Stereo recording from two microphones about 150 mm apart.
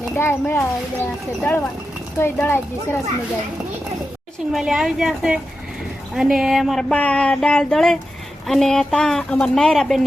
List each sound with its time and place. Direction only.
0.2 s speech: 15° left (ahead or behind)
4.5 s speech: centre (ahead or behind)